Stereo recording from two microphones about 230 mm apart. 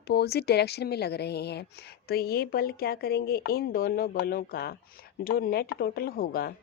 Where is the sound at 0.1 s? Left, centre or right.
Left.